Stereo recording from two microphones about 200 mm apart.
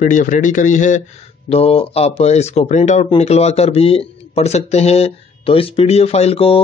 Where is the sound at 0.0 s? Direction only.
40° left (ahead or behind).